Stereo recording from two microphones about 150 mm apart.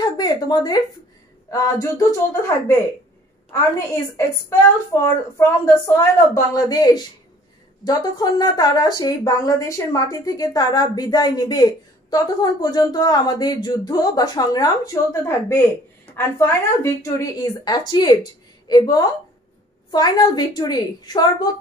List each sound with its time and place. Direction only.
0.0 s a woman's voice: 25° left (ahead or behind)
4.5 s speech: 20° left (ahead or behind)